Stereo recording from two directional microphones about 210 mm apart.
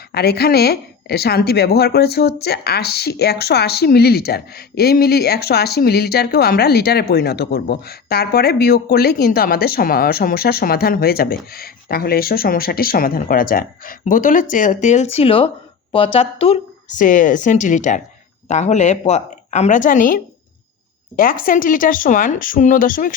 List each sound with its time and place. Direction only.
0.1 s a woman's voice: 50° left (ahead or behind)